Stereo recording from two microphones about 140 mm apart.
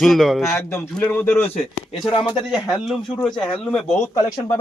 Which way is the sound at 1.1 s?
15° left (ahead or behind).